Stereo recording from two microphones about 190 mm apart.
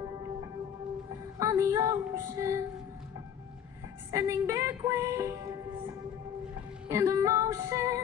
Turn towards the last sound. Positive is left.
turn(degrees=-15)  # may be behind; listen again after turning